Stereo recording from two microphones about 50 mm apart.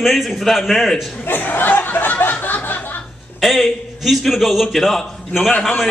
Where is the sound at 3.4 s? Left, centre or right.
Centre.